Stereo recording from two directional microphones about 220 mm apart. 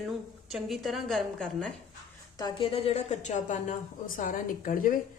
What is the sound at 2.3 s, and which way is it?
A woman's voice, 20° left (ahead or behind).